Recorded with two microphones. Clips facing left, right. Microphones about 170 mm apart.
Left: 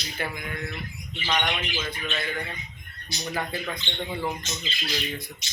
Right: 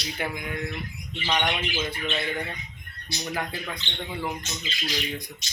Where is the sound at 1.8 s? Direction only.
30° right (ahead or behind).